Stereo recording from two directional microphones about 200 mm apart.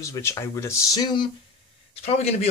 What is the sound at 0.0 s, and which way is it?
Speech, 15° left (ahead or behind).